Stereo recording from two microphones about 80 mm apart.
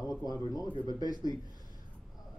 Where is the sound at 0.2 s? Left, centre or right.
Left.